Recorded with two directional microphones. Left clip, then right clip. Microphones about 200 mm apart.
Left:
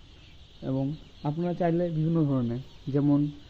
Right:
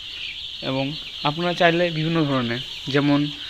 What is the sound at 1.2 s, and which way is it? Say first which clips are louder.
Speech: right 10 dB; centre (ahead or behind).